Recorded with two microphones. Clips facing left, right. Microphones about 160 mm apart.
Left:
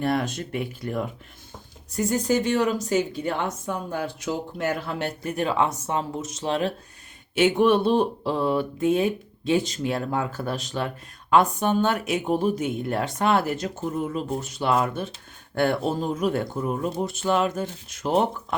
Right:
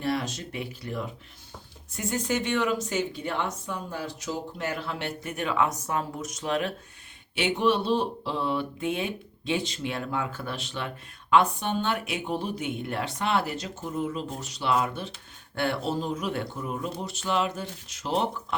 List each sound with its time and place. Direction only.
0.0 s speech: 55° left (ahead or behind)
1.9 s speech: 40° left (ahead or behind)
7.3 s speech: 50° left (ahead or behind)